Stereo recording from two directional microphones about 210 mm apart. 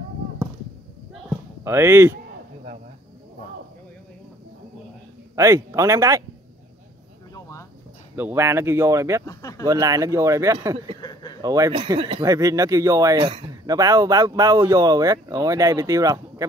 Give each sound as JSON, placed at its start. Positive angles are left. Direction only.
{"t": 1.6, "sound": "speech", "side_deg": -15}
{"t": 5.3, "sound": "speech", "side_deg": -15}
{"t": 7.3, "sound": "a sound", "side_deg": 15}
{"t": 8.2, "sound": "speech", "side_deg": -10}
{"t": 9.2, "sound": "speech", "side_deg": 15}
{"t": 9.7, "sound": "speech", "side_deg": -15}
{"t": 11.0, "sound": "a sound", "side_deg": 20}
{"t": 11.4, "sound": "speech", "side_deg": -15}